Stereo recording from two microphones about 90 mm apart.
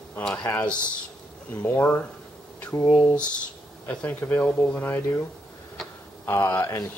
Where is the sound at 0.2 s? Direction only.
15° left (ahead or behind).